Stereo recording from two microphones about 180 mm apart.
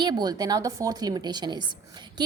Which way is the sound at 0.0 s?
25° right (ahead or behind).